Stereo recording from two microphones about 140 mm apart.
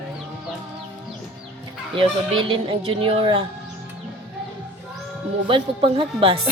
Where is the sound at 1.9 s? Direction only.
40° right (ahead or behind).